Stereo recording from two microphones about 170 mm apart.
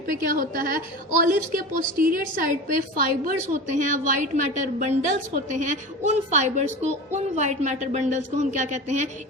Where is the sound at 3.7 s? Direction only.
45° right (ahead or behind).